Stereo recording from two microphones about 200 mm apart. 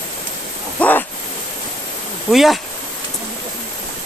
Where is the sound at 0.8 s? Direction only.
10° left (ahead or behind).